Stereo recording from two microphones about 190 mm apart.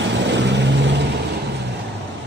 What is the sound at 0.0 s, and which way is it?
Vehicle, 65° right (ahead or behind).